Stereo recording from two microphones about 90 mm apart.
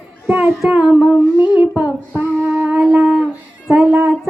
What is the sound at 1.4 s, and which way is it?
Child singing, 15° right (ahead or behind).